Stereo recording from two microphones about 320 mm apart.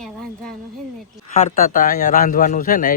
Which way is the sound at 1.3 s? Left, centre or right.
Left.